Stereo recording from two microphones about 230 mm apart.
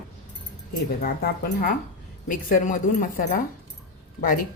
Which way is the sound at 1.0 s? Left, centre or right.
Left.